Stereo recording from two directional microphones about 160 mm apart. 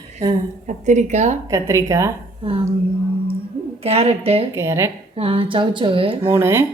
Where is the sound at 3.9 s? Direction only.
40° right (ahead or behind).